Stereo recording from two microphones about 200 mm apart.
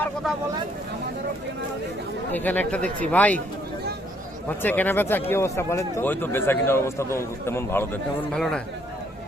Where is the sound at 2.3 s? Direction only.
10° left (ahead or behind).